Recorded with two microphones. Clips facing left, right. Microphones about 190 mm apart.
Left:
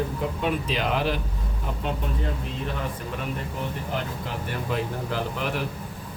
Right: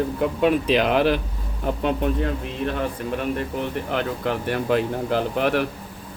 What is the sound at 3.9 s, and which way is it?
Speech, 65° right (ahead or behind).